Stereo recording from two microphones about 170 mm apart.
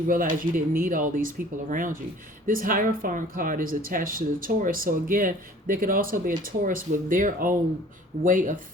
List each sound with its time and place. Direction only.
0.1 s speech: 55° right (ahead or behind)